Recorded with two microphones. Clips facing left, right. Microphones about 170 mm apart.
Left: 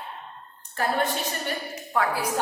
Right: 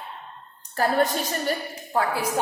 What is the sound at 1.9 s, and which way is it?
Speech, 30° right (ahead or behind).